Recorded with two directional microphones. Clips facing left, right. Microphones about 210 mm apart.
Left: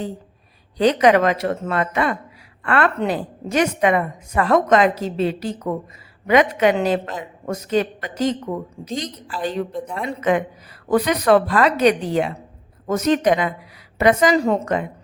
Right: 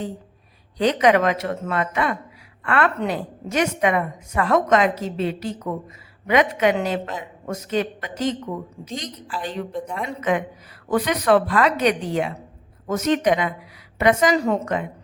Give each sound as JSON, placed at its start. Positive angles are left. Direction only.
{"t": 0.8, "sound": "a woman's voice", "side_deg": 35}
{"t": 9.7, "sound": "a woman's voice", "side_deg": 5}
{"t": 10.1, "sound": "a woman's voice", "side_deg": 35}